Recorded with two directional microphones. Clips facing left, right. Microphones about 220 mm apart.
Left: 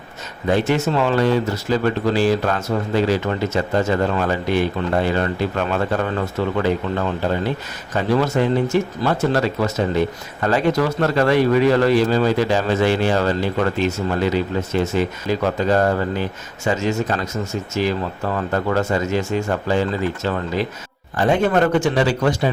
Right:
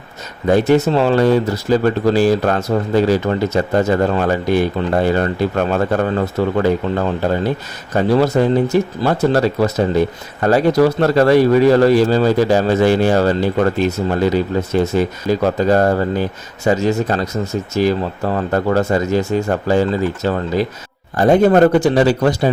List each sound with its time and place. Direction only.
0.4 s speech: 40° right (ahead or behind)
7.9 s speech: 35° right (ahead or behind)